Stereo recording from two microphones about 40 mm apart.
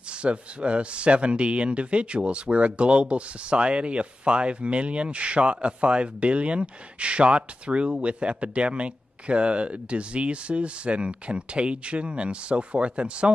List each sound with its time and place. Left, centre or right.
0.2 s speech: right